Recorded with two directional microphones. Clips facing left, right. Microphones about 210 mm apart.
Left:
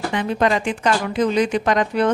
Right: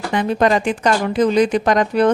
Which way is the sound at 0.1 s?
40° right (ahead or behind).